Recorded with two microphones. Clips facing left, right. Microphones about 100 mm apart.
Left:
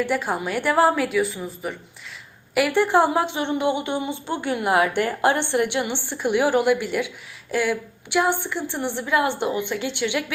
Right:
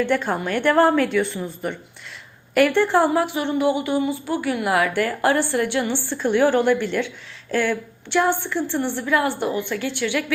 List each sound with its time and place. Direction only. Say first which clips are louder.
0.0 s a woman's voice: right 2 dB; 10° left (ahead or behind)